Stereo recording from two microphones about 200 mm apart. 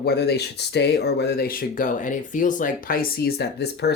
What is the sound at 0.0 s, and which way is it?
Speech, 55° left (ahead or behind).